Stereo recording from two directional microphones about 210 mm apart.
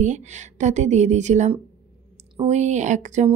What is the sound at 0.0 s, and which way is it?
Speech, 35° right (ahead or behind).